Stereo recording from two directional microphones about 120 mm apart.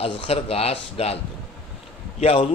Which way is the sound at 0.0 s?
55° left (ahead or behind).